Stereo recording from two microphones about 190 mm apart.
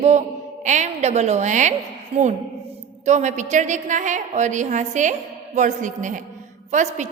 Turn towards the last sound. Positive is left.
turn(degrees=-40)  # may be behind; listen again after turning